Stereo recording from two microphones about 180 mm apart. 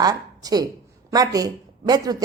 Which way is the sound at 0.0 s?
20° right (ahead or behind).